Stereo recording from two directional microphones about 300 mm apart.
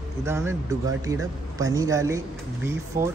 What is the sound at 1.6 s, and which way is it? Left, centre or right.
Speech, centre.